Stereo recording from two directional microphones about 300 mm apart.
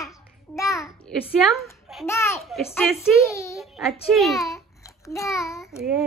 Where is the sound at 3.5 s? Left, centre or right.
Centre.